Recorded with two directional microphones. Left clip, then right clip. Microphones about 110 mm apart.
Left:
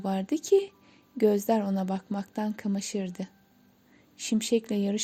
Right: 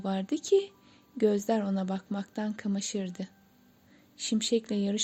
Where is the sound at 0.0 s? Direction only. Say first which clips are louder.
Left 2 dB; 40° left (ahead or behind).